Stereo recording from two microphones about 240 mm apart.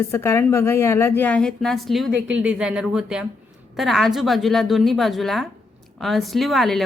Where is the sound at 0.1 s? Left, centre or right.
Centre.